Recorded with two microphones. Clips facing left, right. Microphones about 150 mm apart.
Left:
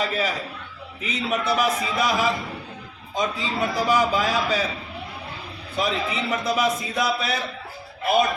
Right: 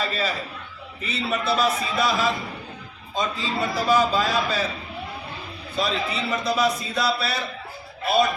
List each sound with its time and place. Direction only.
0.0 s a man's voice: 15° left (ahead or behind)
5.7 s a man's voice: 15° left (ahead or behind)